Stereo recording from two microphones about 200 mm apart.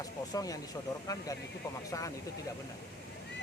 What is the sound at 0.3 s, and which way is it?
Speech, 20° left (ahead or behind).